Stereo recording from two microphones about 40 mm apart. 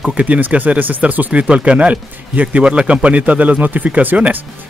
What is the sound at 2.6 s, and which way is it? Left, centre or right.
Speech, right.